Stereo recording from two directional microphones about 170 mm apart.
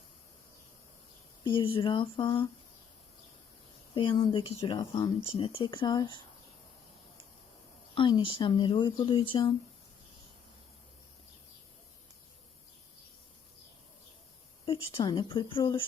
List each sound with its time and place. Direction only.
1.5 s speech: 30° left (ahead or behind)
3.9 s speech: 30° left (ahead or behind)
7.9 s speech: 30° left (ahead or behind)
14.6 s speech: 30° left (ahead or behind)